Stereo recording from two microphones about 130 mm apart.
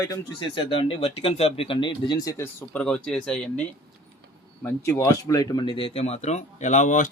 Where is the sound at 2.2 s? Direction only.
25° left (ahead or behind).